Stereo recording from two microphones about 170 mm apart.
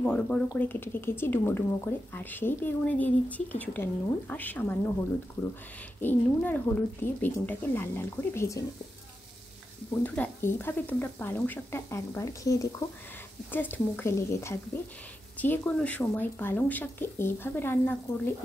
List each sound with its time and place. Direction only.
0.0 s speech: 5° left (ahead or behind)
5.9 s speech: 10° left (ahead or behind)
10.0 s speech: 10° left (ahead or behind)